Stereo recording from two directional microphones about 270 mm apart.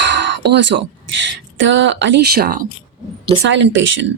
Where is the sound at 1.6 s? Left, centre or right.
Right.